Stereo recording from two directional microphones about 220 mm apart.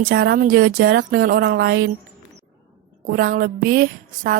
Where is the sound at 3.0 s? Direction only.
40° right (ahead or behind).